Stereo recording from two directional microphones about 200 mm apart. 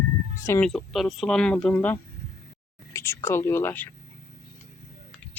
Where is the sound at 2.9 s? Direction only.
15° left (ahead or behind).